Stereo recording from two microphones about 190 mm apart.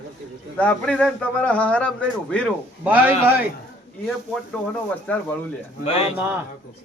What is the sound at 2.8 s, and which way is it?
Speech, 10° right (ahead or behind).